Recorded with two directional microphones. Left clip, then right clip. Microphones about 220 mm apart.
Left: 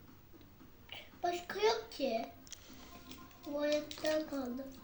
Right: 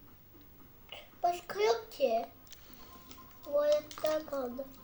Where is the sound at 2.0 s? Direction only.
30° right (ahead or behind).